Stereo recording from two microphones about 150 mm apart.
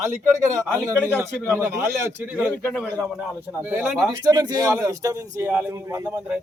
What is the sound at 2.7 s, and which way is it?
Speech, 5° right (ahead or behind).